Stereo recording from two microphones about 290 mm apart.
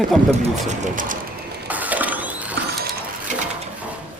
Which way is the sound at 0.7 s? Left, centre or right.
Right.